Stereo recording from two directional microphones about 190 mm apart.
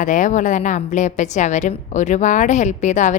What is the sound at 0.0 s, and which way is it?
A woman's voice, 40° left (ahead or behind).